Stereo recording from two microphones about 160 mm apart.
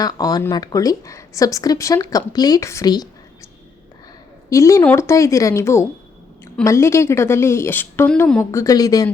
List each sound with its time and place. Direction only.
0.0 s speech: 25° left (ahead or behind)
4.4 s a woman's voice: 20° left (ahead or behind)
8.6 s speech: 25° left (ahead or behind)